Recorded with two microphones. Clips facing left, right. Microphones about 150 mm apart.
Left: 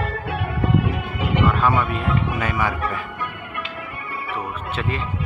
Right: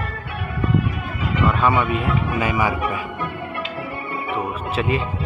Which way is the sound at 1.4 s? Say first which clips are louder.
Right 3 dB; centre (ahead or behind).